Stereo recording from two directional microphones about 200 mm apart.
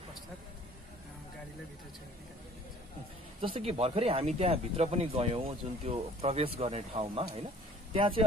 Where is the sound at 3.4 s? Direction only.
30° right (ahead or behind).